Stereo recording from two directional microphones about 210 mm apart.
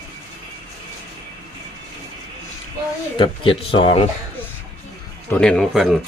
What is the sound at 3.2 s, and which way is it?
Speech, 25° left (ahead or behind).